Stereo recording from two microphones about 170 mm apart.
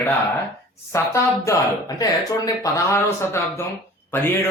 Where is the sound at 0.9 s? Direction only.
15° left (ahead or behind).